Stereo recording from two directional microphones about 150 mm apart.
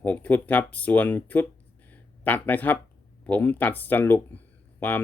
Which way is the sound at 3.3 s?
10° left (ahead or behind).